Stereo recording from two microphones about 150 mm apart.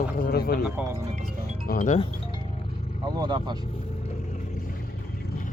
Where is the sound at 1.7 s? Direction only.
55° left (ahead or behind).